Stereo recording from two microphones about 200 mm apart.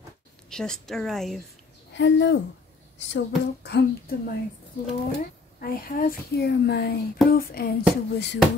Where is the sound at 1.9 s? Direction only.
65° left (ahead or behind).